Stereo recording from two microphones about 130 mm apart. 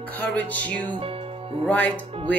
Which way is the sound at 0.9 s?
45° right (ahead or behind).